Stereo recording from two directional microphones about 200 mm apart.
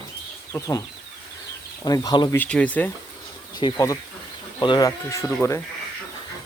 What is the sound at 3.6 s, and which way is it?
Speech, 15° left (ahead or behind).